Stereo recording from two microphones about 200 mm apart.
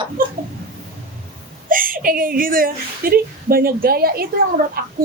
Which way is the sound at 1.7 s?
45° right (ahead or behind).